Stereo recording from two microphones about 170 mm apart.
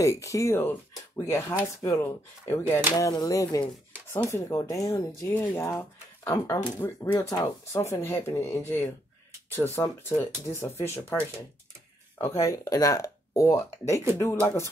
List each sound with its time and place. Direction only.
0.0 s speech: 20° left (ahead or behind)